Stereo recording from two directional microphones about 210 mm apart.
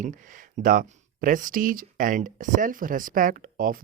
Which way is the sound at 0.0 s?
40° right (ahead or behind).